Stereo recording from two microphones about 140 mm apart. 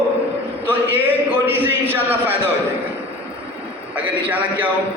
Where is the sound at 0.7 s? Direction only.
15° right (ahead or behind).